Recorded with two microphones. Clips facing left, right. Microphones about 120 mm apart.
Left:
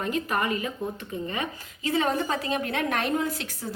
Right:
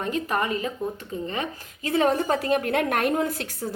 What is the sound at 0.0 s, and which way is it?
Speech, 35° right (ahead or behind).